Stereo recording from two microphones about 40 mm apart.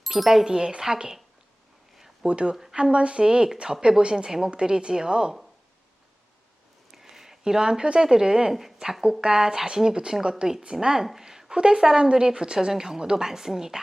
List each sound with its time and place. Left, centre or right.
0.0 s a sound: centre
0.3 s speech: centre
2.2 s a woman's voice: right
4.3 s speech: centre
4.5 s a woman's voice: right
6.9 s speech: centre